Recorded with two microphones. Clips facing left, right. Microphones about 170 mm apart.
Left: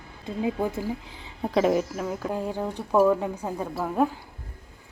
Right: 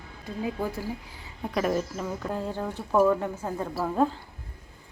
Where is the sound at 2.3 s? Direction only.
15° left (ahead or behind).